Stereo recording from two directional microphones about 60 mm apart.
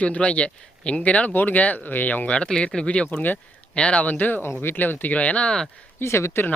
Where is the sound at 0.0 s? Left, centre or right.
Left.